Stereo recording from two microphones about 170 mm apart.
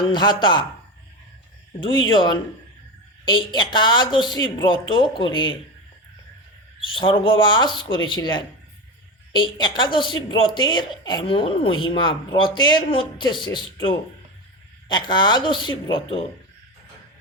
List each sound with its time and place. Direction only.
0.1 s speech: 25° left (ahead or behind)
1.8 s speech: 30° left (ahead or behind)
6.7 s speech: 30° left (ahead or behind)
14.8 s speech: 25° left (ahead or behind)